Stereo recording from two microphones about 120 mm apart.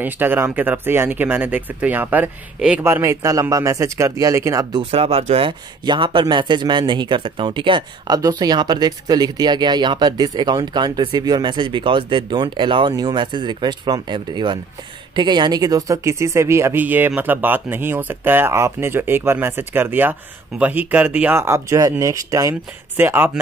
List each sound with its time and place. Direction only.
0.0 s speech: 15° right (ahead or behind)
4.9 s speech: 55° right (ahead or behind)
5.9 s speech: 45° right (ahead or behind)
8.2 s speech: 30° right (ahead or behind)